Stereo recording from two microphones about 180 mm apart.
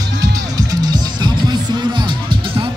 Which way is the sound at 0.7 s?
25° right (ahead or behind).